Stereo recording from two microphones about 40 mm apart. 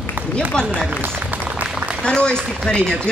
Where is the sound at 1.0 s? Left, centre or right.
Right.